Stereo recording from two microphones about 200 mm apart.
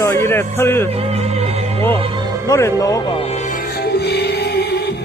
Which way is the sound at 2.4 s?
15° left (ahead or behind).